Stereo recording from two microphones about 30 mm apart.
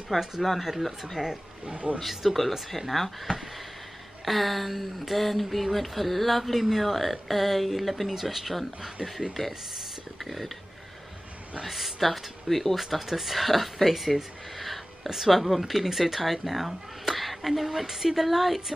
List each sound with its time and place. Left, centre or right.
0.4 s speech: centre
1.1 s speech: centre
2.0 s speech: centre
4.2 s speech: centre
11.6 s speech: centre
12.7 s speech: centre